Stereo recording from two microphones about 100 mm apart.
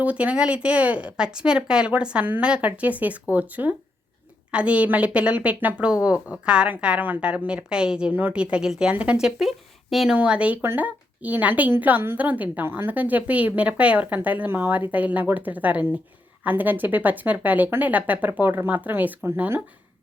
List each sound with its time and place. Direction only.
0.0 s a woman's voice: 15° right (ahead or behind)
10.2 s a woman's voice: 10° right (ahead or behind)